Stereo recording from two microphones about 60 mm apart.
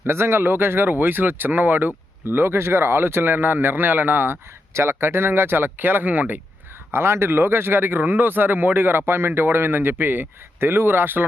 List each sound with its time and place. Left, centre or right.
0.1 s speech: right
4.7 s speech: right
6.9 s speech: right